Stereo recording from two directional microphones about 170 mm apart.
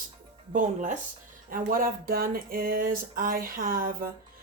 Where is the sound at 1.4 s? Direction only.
55° right (ahead or behind).